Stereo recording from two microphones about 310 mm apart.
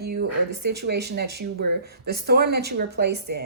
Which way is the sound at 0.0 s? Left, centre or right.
Right.